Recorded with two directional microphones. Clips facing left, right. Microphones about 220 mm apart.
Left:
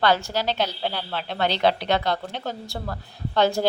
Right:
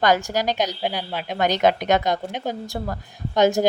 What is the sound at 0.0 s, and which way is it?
A woman's voice, 15° right (ahead or behind).